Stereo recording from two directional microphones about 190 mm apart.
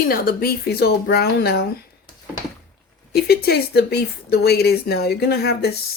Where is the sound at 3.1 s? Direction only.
55° left (ahead or behind).